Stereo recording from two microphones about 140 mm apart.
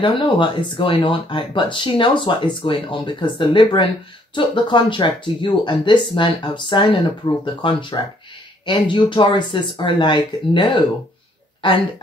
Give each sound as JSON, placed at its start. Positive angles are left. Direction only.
{"t": 0.0, "sound": "speech", "side_deg": 35}